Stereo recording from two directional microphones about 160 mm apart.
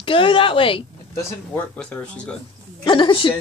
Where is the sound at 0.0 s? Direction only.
35° left (ahead or behind).